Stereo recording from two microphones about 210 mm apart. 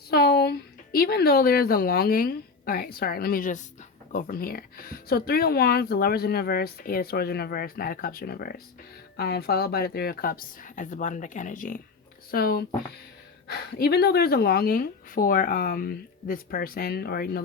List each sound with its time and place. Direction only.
0.1 s a woman's voice: 50° left (ahead or behind)